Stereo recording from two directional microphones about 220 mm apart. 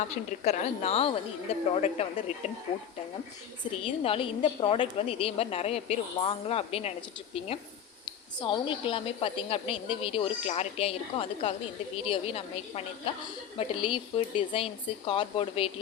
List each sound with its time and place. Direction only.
0.1 s a woman's voice: 30° left (ahead or behind)
3.7 s a woman's voice: 25° left (ahead or behind)